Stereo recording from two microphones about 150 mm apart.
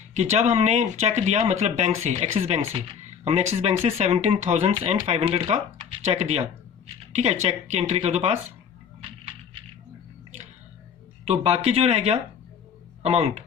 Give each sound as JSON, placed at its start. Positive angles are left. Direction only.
{"t": 0.1, "sound": "speech", "side_deg": -50}
{"t": 11.3, "sound": "speech", "side_deg": -45}